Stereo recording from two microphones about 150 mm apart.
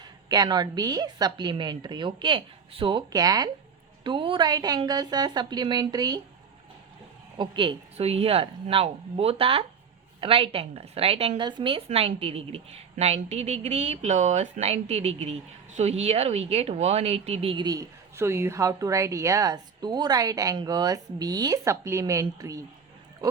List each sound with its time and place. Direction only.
0.0 s a woman's voice: 25° right (ahead or behind)
7.3 s a woman's voice: 35° right (ahead or behind)
17.7 s a woman's voice: 20° right (ahead or behind)